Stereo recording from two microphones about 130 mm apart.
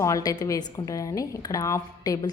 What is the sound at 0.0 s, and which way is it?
A woman's voice, 25° left (ahead or behind).